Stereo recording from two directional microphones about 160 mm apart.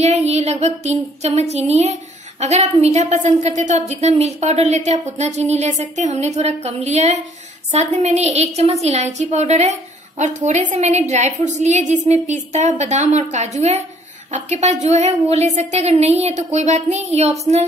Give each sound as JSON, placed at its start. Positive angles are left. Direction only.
{"t": 0.0, "sound": "a woman's voice", "side_deg": -45}